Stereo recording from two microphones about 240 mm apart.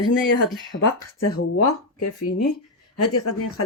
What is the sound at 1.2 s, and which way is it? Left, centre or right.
Speech, left.